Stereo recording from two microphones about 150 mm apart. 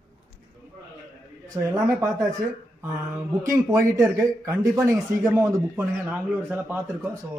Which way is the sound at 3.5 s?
20° right (ahead or behind).